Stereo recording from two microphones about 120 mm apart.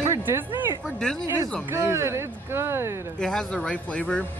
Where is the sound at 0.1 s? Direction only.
20° right (ahead or behind).